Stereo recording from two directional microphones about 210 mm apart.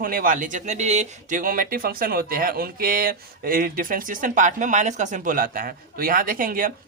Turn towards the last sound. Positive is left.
turn(degrees=-40)  # may be behind; listen again after turning